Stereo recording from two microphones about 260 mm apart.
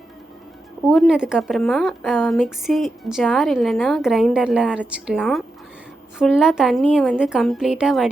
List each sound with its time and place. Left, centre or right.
0.9 s a woman's voice: centre